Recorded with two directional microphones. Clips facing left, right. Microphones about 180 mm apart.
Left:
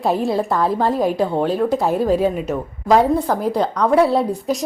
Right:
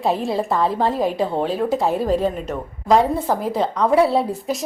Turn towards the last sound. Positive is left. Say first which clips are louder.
# left 2 dB
turn(degrees=0)  # may be behind; listen again after turning